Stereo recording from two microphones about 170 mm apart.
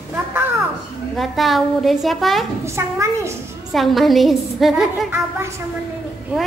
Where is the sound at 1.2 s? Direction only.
Centre (ahead or behind).